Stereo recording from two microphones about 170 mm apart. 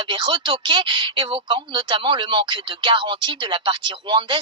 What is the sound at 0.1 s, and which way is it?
Speech, 30° right (ahead or behind).